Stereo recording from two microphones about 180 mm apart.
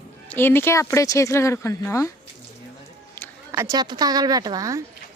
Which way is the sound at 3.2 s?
15° left (ahead or behind).